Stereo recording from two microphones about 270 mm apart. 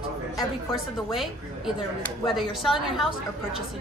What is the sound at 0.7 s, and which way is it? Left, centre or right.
Speech, centre.